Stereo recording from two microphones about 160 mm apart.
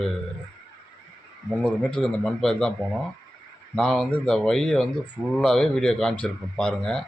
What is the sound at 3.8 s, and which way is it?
A man's voice, 5° left (ahead or behind).